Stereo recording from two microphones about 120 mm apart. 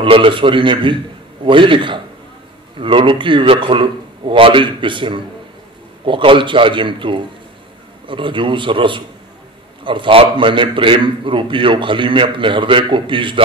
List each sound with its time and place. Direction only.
0.0 s a man's voice: 45° right (ahead or behind)